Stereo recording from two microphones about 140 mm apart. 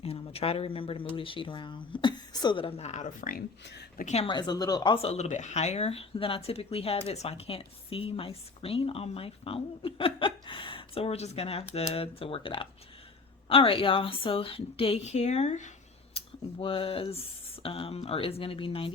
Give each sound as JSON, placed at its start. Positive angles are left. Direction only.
{"t": 0.0, "sound": "speech", "side_deg": 45}
{"t": 3.9, "sound": "speech", "side_deg": 60}
{"t": 4.2, "sound": "speech", "side_deg": 30}
{"t": 5.0, "sound": "speech", "side_deg": 50}
{"t": 16.1, "sound": "speech", "side_deg": 40}